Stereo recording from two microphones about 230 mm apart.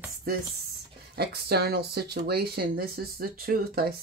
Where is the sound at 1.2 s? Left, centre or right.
Right.